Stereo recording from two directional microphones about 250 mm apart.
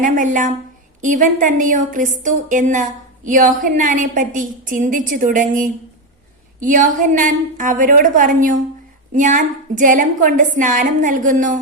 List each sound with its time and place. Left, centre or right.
0.0 s a woman's voice: right